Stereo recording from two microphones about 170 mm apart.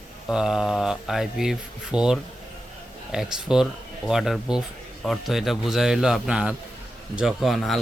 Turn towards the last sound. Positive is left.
turn(degrees=0)  # may be behind; listen again after turning